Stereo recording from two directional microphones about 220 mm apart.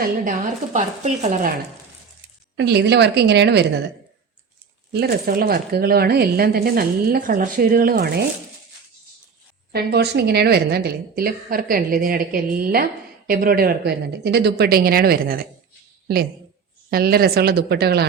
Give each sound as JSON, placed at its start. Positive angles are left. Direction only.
{"t": 0.0, "sound": "speech", "side_deg": -35}
{"t": 2.6, "sound": "a woman's voice", "side_deg": -50}
{"t": 9.7, "sound": "a woman's voice", "side_deg": -50}
{"t": 16.9, "sound": "a woman's voice", "side_deg": -45}